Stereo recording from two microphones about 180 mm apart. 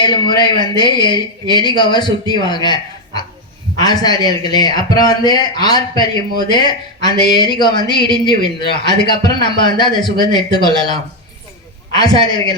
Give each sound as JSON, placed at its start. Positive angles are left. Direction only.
{"t": 0.3, "sound": "a man's voice", "side_deg": 25}
{"t": 3.8, "sound": "a man's voice", "side_deg": 20}